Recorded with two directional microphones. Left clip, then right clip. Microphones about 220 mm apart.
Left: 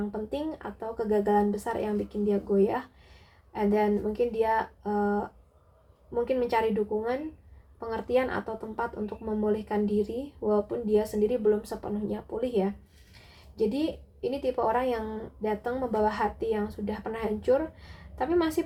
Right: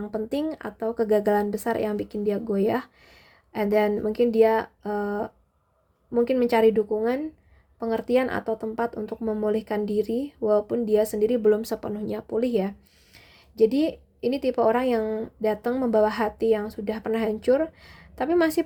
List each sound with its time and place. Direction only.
0.1 s a woman's voice: 50° right (ahead or behind)